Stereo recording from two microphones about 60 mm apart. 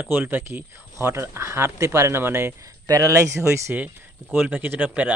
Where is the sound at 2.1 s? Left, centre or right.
Right.